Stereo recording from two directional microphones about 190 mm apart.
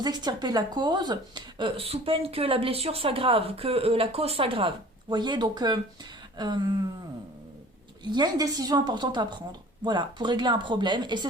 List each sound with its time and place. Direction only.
0.0 s a woman's voice: 20° right (ahead or behind)
8.1 s a woman's voice: 20° right (ahead or behind)